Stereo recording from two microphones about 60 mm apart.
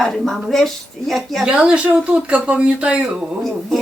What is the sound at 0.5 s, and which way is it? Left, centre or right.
Speech, centre.